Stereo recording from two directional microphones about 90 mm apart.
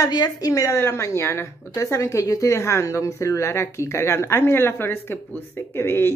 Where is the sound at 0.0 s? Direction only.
45° left (ahead or behind).